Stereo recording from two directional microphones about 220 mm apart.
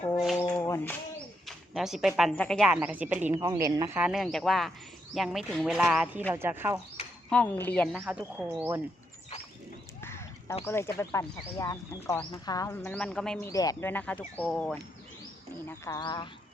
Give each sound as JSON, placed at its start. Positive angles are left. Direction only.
{"t": 0.2, "sound": "a sound", "side_deg": 0}
{"t": 0.5, "sound": "a sound", "side_deg": 10}
{"t": 1.5, "sound": "speech", "side_deg": 0}
{"t": 7.3, "sound": "speech", "side_deg": 5}
{"t": 8.0, "sound": "speech", "side_deg": -5}
{"t": 10.0, "sound": "a sound", "side_deg": 10}
{"t": 10.7, "sound": "speech", "side_deg": 10}
{"t": 13.5, "sound": "speech", "side_deg": 15}
{"t": 15.8, "sound": "speech", "side_deg": 15}